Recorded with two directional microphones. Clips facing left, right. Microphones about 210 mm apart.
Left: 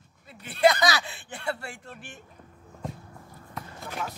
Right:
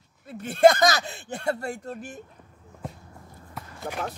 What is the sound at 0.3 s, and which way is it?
Speech, 45° right (ahead or behind).